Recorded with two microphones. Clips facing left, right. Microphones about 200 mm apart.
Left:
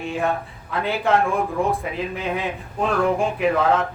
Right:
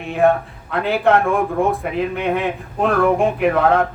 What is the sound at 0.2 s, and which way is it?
Speech, 60° right (ahead or behind).